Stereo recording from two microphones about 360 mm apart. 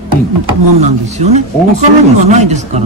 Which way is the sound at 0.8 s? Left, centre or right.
Centre.